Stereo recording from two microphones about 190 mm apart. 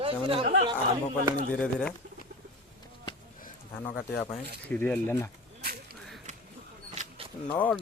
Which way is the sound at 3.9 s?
10° left (ahead or behind).